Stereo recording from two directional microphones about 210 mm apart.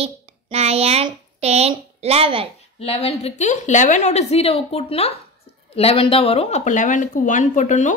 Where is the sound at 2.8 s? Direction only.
30° left (ahead or behind).